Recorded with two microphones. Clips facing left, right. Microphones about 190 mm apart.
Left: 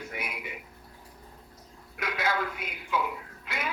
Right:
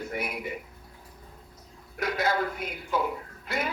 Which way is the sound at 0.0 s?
35° right (ahead or behind).